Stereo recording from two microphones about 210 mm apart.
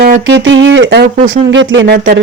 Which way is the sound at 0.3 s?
65° right (ahead or behind).